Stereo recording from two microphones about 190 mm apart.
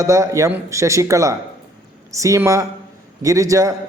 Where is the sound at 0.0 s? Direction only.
15° right (ahead or behind).